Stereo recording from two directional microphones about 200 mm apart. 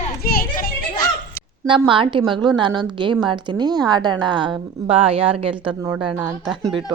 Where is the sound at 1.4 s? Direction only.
15° left (ahead or behind).